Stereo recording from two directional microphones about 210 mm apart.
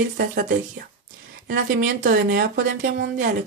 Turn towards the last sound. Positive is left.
turn(degrees=-40)  # may be behind; listen again after turning